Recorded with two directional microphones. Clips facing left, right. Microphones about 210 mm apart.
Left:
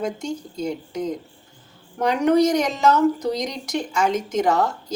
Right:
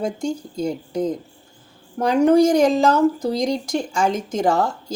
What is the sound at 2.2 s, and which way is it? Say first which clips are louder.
A woman's voice: right 4 dB; 30° right (ahead or behind).